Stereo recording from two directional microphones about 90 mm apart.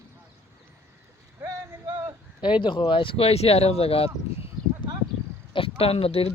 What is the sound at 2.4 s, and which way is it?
Speech, 65° left (ahead or behind).